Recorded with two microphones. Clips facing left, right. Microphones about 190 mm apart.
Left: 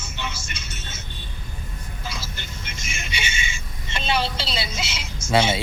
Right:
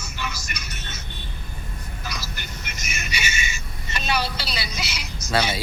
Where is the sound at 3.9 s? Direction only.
25° left (ahead or behind).